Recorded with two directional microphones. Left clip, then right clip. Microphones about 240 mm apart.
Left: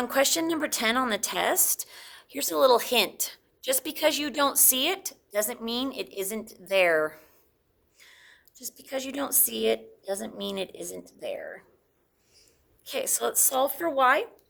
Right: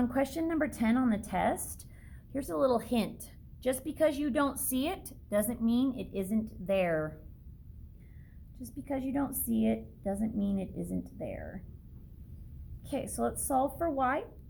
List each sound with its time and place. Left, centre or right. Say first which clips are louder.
0.0 s a woman's voice: left 7 dB; left
8.9 s a woman's voice: left 3 dB; left
12.8 s a woman's voice: left 5 dB; left